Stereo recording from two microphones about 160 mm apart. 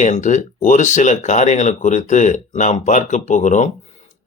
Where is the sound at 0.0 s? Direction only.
50° left (ahead or behind).